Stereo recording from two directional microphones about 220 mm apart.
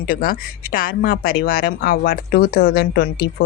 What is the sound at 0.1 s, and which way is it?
A woman's voice, 40° left (ahead or behind).